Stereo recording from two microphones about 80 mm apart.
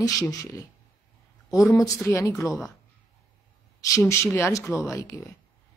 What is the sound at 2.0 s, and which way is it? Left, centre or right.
Speech, left.